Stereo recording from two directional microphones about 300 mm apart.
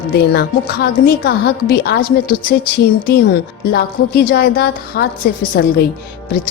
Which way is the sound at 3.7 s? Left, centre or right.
Left.